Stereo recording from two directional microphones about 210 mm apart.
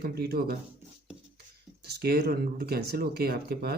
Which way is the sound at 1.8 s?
50° right (ahead or behind).